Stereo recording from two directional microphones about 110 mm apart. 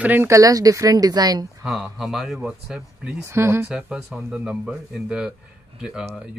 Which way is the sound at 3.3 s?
25° right (ahead or behind).